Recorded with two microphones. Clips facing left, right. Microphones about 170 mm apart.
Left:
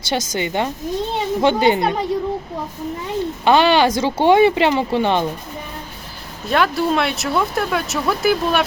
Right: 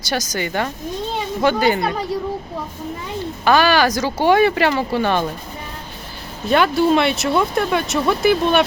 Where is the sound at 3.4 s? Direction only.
25° left (ahead or behind).